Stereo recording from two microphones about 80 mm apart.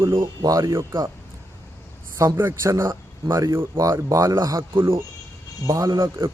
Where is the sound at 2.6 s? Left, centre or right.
Right.